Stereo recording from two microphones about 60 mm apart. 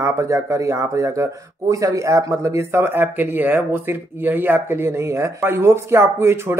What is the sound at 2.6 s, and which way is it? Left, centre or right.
Speech, right.